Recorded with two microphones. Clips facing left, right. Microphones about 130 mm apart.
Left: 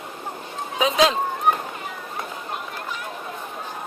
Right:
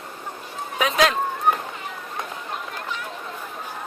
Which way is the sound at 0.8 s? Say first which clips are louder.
Left 1 dB; 25° left (ahead or behind).